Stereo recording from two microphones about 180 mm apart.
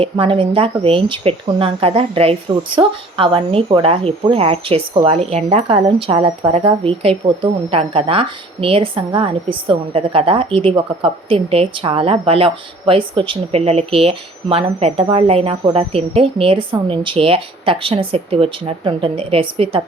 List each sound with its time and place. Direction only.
0.0 s a woman's voice: 30° right (ahead or behind)